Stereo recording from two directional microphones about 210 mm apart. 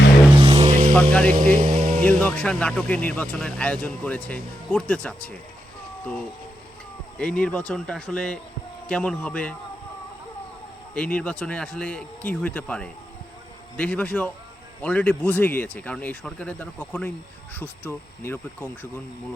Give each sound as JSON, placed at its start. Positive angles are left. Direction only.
{"t": 0.3, "sound": "vehicle", "side_deg": -30}
{"t": 1.2, "sound": "speech", "side_deg": -45}
{"t": 2.0, "sound": "speech", "side_deg": 5}
{"t": 7.2, "sound": "speech", "side_deg": 5}
{"t": 10.9, "sound": "speech", "side_deg": 5}